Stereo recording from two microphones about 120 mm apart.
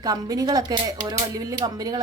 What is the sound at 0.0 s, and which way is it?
Speech, 30° right (ahead or behind).